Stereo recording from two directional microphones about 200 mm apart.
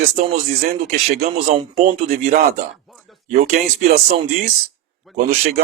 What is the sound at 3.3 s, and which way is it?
Speech, 35° right (ahead or behind).